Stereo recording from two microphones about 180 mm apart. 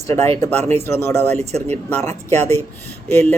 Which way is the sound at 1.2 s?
35° right (ahead or behind).